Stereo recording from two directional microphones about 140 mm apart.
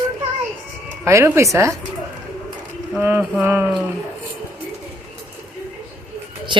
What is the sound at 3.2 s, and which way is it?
Speech, 10° right (ahead or behind).